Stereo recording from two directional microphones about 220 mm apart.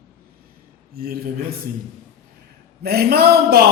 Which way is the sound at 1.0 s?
45° right (ahead or behind).